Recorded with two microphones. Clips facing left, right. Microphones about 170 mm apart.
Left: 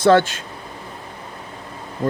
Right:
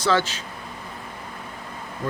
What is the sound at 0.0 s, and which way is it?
Speech, 55° left (ahead or behind).